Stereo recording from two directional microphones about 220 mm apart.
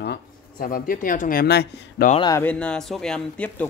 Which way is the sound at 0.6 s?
40° left (ahead or behind).